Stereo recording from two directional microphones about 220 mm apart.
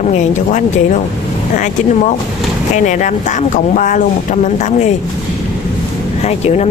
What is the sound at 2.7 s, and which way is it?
Speech, 35° left (ahead or behind).